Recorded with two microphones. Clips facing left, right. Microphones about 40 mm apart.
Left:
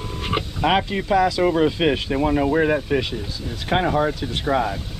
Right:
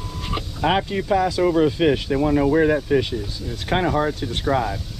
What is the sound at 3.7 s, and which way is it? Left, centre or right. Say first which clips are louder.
Speech: left 1 dB; left.